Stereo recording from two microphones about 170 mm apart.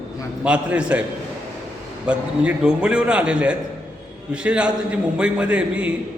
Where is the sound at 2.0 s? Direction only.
5° right (ahead or behind).